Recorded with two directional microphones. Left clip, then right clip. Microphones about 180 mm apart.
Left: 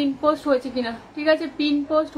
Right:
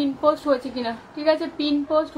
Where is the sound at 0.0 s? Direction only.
5° left (ahead or behind).